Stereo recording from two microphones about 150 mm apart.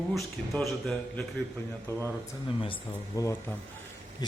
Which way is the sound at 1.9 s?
15° left (ahead or behind).